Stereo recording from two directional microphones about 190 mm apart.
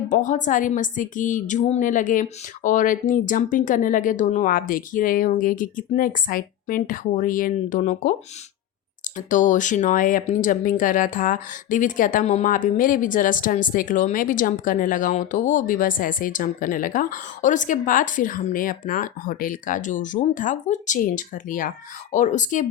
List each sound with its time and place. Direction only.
0.1 s speech: 40° left (ahead or behind)
9.1 s speech: 45° left (ahead or behind)